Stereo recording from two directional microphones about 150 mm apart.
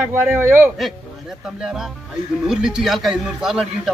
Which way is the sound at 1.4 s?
5° right (ahead or behind).